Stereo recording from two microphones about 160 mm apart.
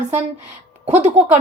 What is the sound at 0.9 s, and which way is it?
Speech, 45° right (ahead or behind).